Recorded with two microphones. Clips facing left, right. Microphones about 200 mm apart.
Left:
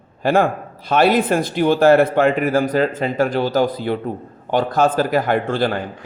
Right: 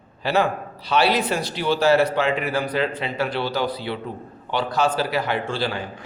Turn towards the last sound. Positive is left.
turn(degrees=55)  # may be behind; listen again after turning